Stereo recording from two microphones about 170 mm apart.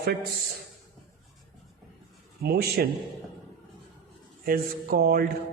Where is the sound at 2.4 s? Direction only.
70° right (ahead or behind).